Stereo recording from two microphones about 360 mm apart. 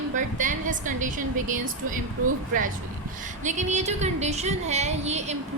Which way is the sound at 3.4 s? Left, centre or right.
Centre.